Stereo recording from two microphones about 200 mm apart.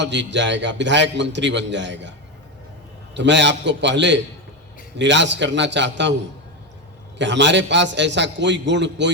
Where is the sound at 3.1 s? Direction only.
60° right (ahead or behind).